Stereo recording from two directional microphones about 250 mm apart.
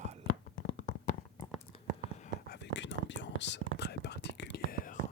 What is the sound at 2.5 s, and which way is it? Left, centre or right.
Whispering, left.